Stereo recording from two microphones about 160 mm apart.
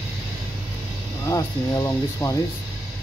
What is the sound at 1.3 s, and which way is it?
Speech, 20° left (ahead or behind).